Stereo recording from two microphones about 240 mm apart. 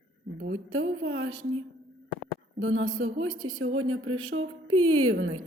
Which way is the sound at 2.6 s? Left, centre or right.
Right.